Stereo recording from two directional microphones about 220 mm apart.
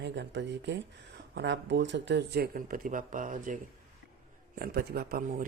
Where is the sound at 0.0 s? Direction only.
55° right (ahead or behind).